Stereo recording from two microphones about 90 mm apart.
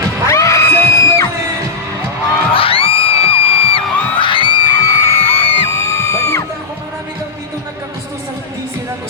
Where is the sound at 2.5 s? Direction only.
90° left.